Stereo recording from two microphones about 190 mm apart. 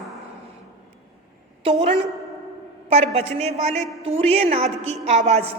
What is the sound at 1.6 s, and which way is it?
A woman's voice, 30° right (ahead or behind).